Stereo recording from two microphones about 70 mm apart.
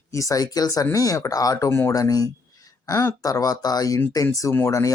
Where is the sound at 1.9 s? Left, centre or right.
Left.